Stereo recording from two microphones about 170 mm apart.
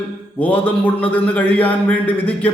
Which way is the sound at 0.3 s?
10° left (ahead or behind).